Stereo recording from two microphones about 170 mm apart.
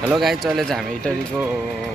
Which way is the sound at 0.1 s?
Centre (ahead or behind).